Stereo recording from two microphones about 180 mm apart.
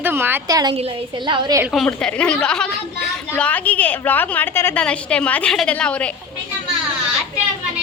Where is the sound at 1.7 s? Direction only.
Centre (ahead or behind).